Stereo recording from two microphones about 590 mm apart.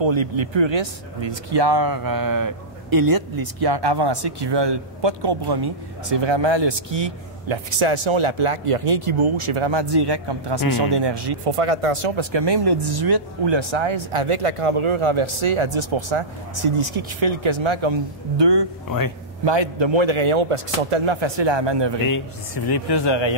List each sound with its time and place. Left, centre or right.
0.0 s speech: right
10.6 s speech: left
11.0 s speech: right
11.4 s speech: right
18.9 s speech: left
19.4 s speech: right
22.1 s speech: left